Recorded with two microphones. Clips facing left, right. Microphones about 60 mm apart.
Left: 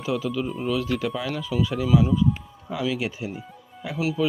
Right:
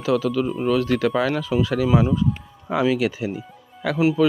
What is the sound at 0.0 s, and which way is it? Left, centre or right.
Speech, right.